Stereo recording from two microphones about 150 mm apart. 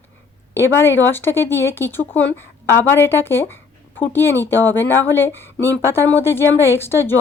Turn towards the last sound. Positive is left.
turn(degrees=15)  # may be behind; listen again after turning